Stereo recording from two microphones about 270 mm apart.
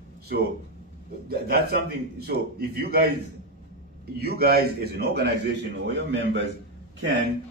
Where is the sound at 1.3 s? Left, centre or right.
Right.